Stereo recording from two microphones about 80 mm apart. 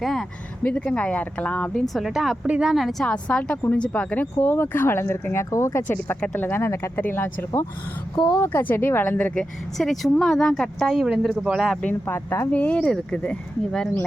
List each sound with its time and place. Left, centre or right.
0.0 s speech: centre
0.6 s speech: centre
1.8 s speech: centre
2.7 s speech: centre; by 5.8 s left
5.9 s speech: left
8.3 s speech: left
9.3 s speech: centre
10.9 s speech: centre
12.0 s speech: left; by 13.9 s centre